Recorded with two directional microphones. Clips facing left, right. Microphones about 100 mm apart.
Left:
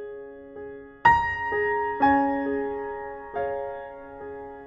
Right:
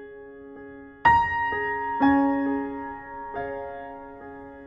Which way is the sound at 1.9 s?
35° right (ahead or behind).